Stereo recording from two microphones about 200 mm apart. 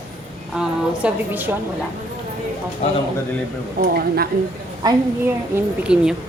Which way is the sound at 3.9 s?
50° right (ahead or behind).